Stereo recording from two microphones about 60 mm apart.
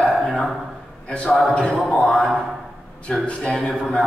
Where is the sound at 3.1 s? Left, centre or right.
Centre.